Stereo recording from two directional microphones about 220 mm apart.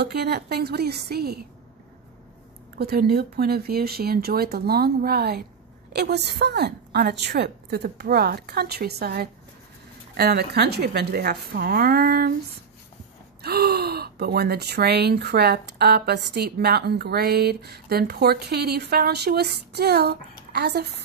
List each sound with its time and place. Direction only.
0.0 s speech: 45° right (ahead or behind)
2.8 s speech: 45° right (ahead or behind)
13.4 s speech: 45° right (ahead or behind)